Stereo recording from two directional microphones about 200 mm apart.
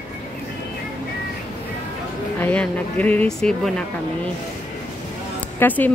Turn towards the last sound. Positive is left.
turn(degrees=10)  # may be behind; listen again after turning